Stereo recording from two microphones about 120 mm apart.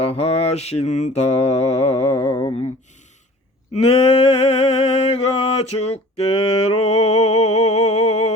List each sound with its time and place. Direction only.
0.0 s mantra: 55° left (ahead or behind)
2.1 s mantra: 30° left (ahead or behind)
2.4 s mantra: 60° left (ahead or behind)
3.9 s a sound: 50° left (ahead or behind)